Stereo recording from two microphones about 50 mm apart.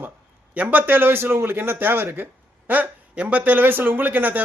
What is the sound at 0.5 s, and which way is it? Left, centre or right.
Speech, right.